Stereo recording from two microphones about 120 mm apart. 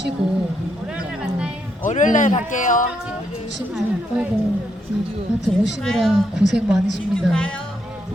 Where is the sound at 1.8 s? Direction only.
90° left.